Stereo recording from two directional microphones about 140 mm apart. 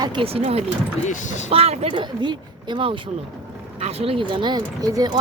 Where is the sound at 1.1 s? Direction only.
55° left (ahead or behind).